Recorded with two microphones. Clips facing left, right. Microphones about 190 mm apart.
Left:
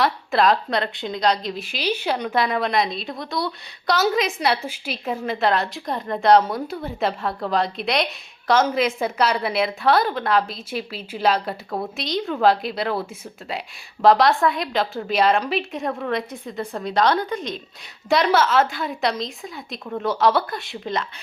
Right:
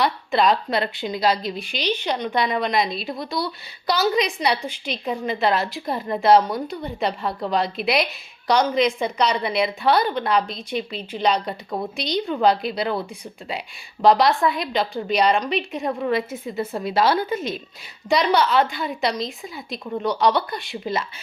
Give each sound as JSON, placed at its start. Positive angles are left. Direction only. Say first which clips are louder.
{"t": 0.0, "sound": "a woman's voice", "louder": "left 1 dB", "side_deg": 0}